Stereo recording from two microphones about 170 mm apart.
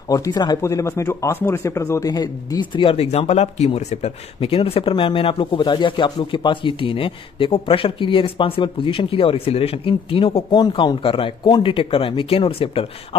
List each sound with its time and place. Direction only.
0.1 s speech: 25° left (ahead or behind)